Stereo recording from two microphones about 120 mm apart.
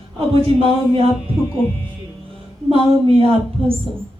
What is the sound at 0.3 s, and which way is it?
Speech, 50° right (ahead or behind).